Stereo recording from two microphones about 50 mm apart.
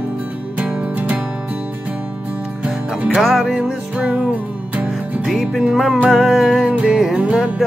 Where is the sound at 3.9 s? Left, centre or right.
Right.